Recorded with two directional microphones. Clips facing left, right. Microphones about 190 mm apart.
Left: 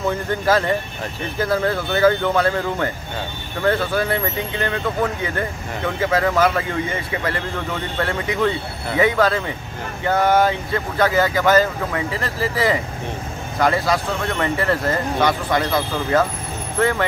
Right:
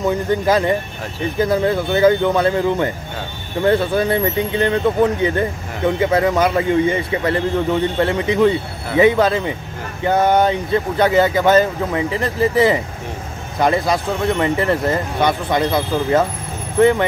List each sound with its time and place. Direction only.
0.0 s speech: 15° right (ahead or behind)